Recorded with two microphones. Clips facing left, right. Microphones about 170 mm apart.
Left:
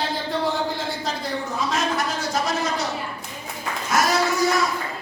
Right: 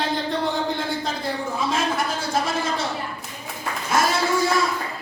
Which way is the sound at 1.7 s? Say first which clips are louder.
Left 1 dB; 30° right (ahead or behind).